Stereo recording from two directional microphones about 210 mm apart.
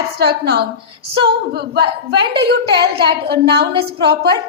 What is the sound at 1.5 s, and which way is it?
Speech, 50° right (ahead or behind).